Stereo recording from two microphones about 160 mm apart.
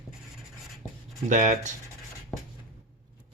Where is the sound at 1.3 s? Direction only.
50° right (ahead or behind).